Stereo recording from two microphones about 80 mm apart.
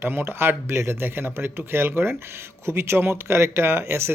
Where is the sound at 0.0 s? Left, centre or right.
Right.